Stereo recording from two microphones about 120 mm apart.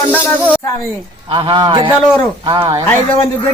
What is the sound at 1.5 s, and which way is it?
A man's voice, 40° right (ahead or behind).